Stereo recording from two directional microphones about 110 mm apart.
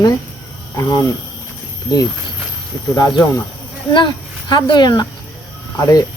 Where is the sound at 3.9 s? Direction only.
40° left (ahead or behind).